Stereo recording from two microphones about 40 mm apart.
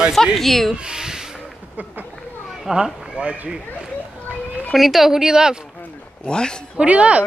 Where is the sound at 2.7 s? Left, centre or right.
Centre.